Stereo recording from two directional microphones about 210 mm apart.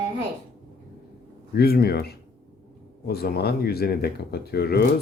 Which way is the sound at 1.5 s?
45° left (ahead or behind).